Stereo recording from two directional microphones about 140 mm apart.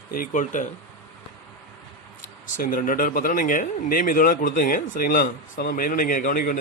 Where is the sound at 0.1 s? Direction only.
75° left (ahead or behind).